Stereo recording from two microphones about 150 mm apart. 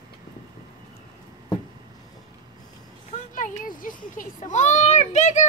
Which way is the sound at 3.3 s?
65° left (ahead or behind).